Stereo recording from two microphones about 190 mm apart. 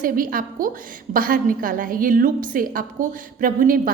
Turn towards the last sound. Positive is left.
turn(degrees=-45)  # may be behind; listen again after turning